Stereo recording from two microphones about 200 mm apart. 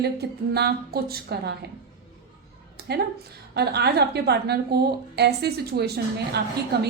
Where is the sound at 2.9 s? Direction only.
55° right (ahead or behind).